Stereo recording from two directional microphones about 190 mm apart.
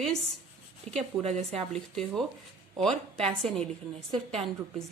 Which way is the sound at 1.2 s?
35° right (ahead or behind).